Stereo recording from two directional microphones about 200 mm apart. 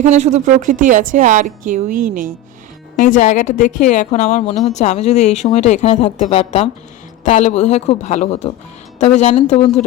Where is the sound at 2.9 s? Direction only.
40° left (ahead or behind).